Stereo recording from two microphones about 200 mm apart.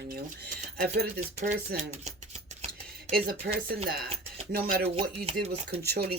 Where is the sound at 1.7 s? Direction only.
40° right (ahead or behind).